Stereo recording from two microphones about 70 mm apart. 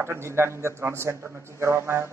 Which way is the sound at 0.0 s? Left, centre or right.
Right.